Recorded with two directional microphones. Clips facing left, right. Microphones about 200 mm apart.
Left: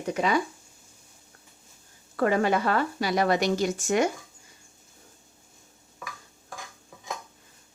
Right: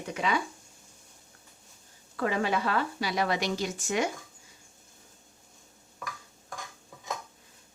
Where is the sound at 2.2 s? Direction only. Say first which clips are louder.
Left 5 dB; 50° left (ahead or behind).